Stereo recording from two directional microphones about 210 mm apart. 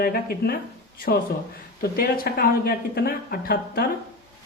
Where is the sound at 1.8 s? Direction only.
45° left (ahead or behind).